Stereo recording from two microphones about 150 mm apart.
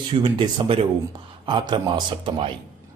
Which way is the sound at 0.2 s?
35° right (ahead or behind).